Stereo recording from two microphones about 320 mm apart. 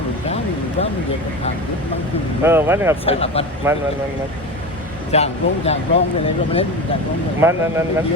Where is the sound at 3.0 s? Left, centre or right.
Centre.